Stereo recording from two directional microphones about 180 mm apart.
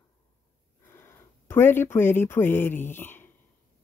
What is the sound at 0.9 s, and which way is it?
Speech, 15° left (ahead or behind).